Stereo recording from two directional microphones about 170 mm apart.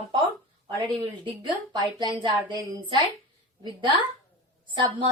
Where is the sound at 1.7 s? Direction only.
25° right (ahead or behind).